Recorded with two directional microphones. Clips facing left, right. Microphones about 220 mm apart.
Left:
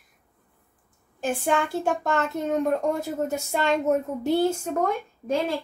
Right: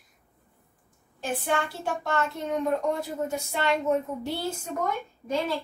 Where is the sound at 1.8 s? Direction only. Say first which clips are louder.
Left 4 dB; 45° left (ahead or behind).